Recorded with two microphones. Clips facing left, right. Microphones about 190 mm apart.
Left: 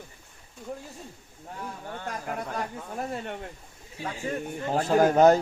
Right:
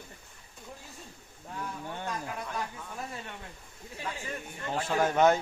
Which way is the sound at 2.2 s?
50° left (ahead or behind).